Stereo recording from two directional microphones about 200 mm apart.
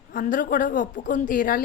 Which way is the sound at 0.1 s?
40° left (ahead or behind).